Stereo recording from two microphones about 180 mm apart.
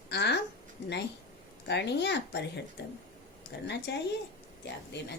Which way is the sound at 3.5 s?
70° left (ahead or behind).